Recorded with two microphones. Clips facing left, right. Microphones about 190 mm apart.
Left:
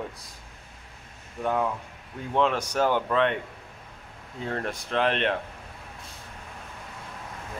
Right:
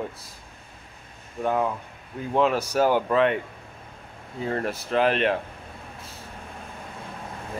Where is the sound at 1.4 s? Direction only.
5° right (ahead or behind).